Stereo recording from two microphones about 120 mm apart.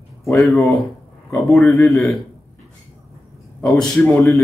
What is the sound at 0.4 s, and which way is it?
Speech, centre (ahead or behind).